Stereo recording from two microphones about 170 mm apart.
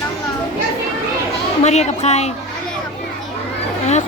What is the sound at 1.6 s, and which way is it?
Speech, 40° left (ahead or behind).